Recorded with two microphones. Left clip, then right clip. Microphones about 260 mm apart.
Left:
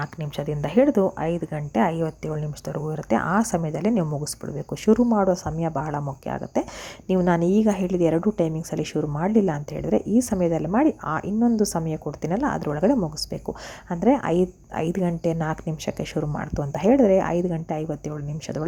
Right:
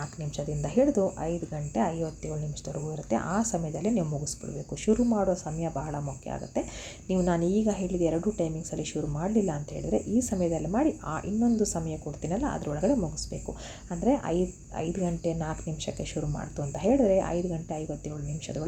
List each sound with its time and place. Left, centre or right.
0.0 s a woman's voice: left